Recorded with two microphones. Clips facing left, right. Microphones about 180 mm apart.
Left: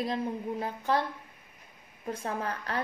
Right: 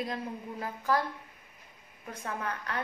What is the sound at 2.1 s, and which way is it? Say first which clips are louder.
Speech: left 3 dB; 30° left (ahead or behind).